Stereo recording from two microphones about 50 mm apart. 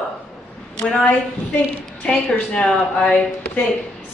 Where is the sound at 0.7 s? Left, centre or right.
Centre.